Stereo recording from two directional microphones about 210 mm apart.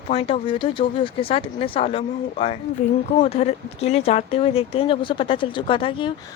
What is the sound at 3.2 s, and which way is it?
Speech, 30° left (ahead or behind).